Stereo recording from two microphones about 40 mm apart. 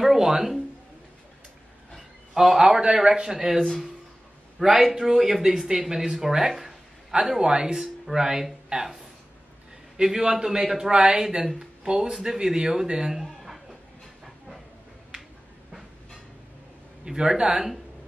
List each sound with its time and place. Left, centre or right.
0.0 s a sound: centre
2.3 s a man's voice: centre
4.6 s a man's voice: centre
10.0 s speech: centre
13.1 s chuckle: centre
17.0 s speech: centre